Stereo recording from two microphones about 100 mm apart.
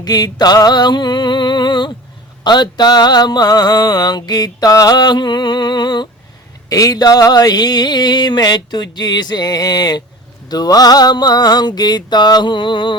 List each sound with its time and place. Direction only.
0.0 s mantra: 40° left (ahead or behind)
6.7 s mantra: 35° left (ahead or behind); by 13.0 s 55° left (ahead or behind)